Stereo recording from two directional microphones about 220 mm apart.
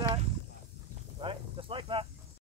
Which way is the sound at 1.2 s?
25° right (ahead or behind).